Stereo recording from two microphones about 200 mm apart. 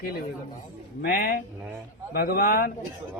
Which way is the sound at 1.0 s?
45° left (ahead or behind).